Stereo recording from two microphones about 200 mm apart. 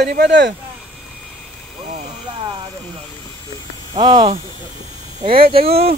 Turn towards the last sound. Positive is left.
turn(degrees=-30)  # may be behind; listen again after turning